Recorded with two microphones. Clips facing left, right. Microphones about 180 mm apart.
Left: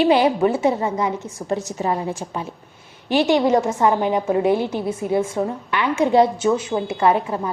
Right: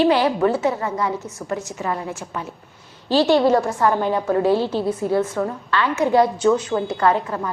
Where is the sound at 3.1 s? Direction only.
20° left (ahead or behind).